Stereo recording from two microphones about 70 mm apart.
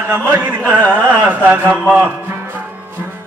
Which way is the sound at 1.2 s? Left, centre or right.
Right.